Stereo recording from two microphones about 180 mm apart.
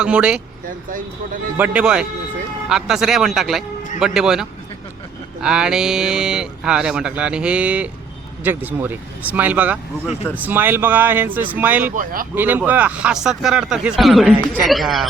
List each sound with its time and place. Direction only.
0.0 s speech: 5° right (ahead or behind)
1.5 s speech: 5° right (ahead or behind)
11.9 s speech: 50° right (ahead or behind)
12.3 s speech: 10° right (ahead or behind)